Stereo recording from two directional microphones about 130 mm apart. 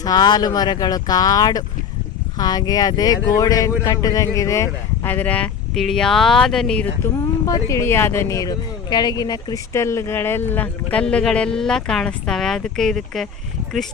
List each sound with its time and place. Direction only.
0.0 s speech: 30° left (ahead or behind); by 6.8 s 5° left (ahead or behind)
7.4 s speech: 25° left (ahead or behind); by 13.2 s 5° left (ahead or behind)